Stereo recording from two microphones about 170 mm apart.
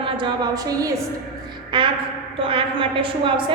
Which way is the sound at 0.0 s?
25° right (ahead or behind).